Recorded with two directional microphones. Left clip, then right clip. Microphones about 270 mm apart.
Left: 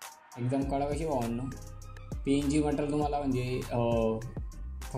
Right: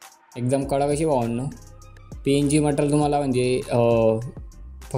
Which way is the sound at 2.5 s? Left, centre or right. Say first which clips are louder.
Right 9 dB; right.